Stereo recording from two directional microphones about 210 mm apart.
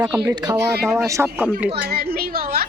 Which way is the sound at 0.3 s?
15° right (ahead or behind).